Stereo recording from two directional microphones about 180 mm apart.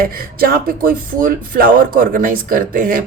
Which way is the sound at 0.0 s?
55° right (ahead or behind).